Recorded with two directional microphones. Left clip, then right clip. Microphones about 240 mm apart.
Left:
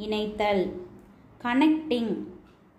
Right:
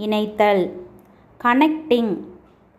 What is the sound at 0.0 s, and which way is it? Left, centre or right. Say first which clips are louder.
A woman's voice: right 9 dB; right.